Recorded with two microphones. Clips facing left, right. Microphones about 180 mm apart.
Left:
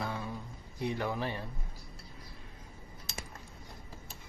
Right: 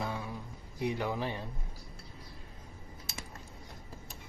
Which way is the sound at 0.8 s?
15° right (ahead or behind).